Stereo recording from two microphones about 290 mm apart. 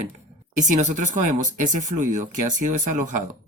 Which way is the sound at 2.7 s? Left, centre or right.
Right.